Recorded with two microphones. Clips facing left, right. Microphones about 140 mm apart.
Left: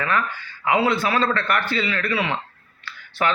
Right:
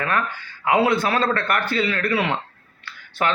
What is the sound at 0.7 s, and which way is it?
A man's voice, 55° right (ahead or behind).